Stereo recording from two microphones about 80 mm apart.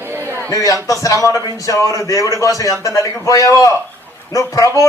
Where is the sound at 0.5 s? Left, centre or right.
Left.